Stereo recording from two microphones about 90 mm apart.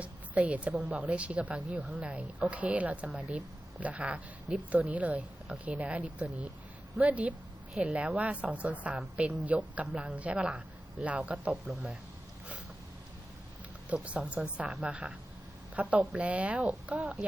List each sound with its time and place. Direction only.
0.0 s a sound: 15° right (ahead or behind)
0.9 s a man's voice: 10° right (ahead or behind)
13.9 s speech: 15° right (ahead or behind)